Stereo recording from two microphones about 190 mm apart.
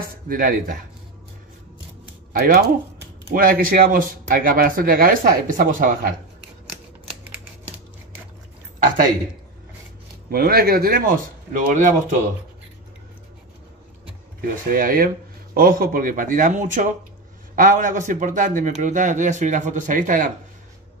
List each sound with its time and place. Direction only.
0.3 s speech: 45° right (ahead or behind)
2.3 s speech: 50° right (ahead or behind)
8.7 s speech: 45° right (ahead or behind)
10.3 s speech: 50° right (ahead or behind)
14.7 s speech: 45° right (ahead or behind)